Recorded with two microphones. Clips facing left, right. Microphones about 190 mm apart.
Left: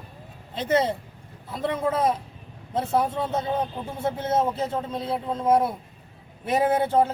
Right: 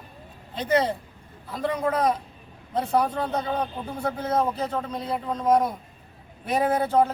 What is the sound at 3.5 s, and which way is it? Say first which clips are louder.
A man's voice: left 1 dB; 25° left (ahead or behind).